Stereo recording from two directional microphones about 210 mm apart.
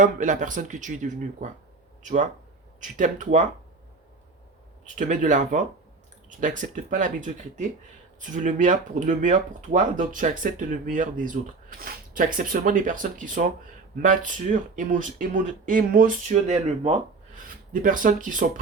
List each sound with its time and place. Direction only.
0.0 s speech: 35° right (ahead or behind)
4.9 s speech: 35° right (ahead or behind)